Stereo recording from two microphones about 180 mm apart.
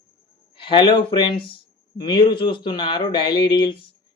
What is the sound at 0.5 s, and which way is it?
Speech, 25° left (ahead or behind).